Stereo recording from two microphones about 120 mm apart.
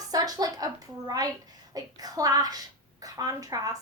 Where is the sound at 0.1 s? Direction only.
30° right (ahead or behind).